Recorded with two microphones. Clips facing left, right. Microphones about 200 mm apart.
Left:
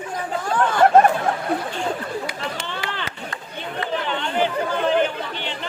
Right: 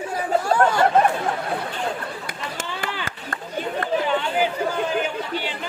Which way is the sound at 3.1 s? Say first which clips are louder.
Right 1 dB; 50° right (ahead or behind).